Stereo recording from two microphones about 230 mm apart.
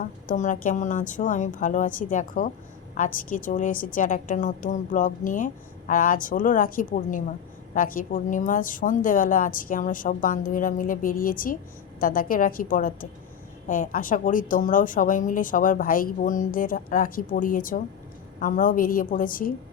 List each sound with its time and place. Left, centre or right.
0.0 s a woman's voice: left